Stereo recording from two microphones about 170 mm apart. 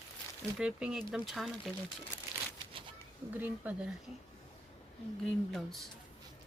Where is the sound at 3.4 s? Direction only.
10° right (ahead or behind).